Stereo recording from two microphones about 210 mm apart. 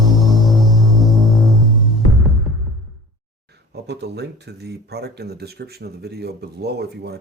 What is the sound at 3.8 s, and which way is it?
Speech, 50° right (ahead or behind).